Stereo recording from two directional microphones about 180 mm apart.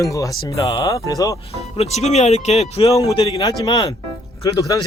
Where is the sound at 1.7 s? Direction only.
35° left (ahead or behind).